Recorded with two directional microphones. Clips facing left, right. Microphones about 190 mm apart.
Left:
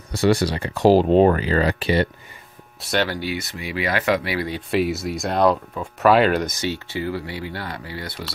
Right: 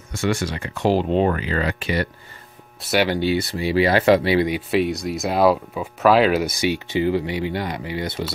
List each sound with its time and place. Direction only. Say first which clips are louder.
0.1 s speech: left 4 dB; 35° left (ahead or behind)
2.8 s speech: right 2 dB; 5° right (ahead or behind)
3.1 s speech: right 7 dB; 25° right (ahead or behind)
4.5 s speech: right 1 dB; 5° right (ahead or behind); by 8.3 s 20° right (ahead or behind)